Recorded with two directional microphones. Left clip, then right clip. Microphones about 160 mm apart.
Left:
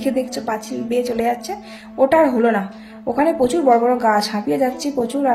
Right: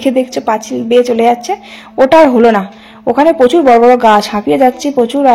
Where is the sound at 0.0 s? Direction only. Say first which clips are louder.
Right 9 dB; 35° right (ahead or behind).